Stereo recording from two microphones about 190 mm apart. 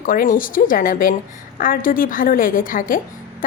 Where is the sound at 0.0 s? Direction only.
45° left (ahead or behind).